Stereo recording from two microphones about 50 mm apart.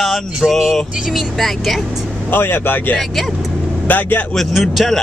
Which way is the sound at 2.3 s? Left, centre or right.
Left.